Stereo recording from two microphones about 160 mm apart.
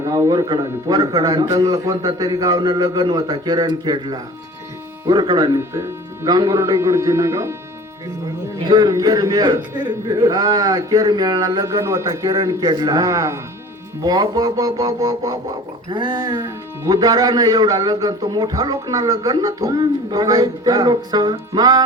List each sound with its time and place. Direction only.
0.0 s speech: 20° right (ahead or behind)
8.6 s speech: 25° right (ahead or behind)